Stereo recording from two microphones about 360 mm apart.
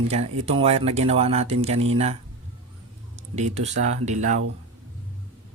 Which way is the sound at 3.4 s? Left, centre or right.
Centre.